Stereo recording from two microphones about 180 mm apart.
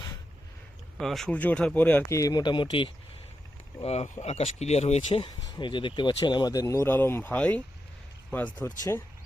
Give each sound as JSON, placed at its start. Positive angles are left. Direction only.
{"t": 0.9, "sound": "speech", "side_deg": 0}
{"t": 3.8, "sound": "speech", "side_deg": 35}
{"t": 5.2, "sound": "speech", "side_deg": 25}